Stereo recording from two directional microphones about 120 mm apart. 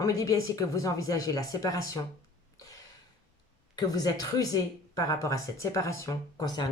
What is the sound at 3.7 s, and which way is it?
A woman's voice, 30° left (ahead or behind).